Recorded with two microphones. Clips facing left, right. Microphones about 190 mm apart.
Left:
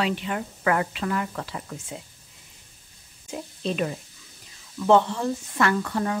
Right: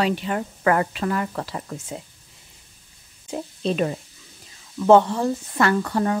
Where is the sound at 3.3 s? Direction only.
35° right (ahead or behind).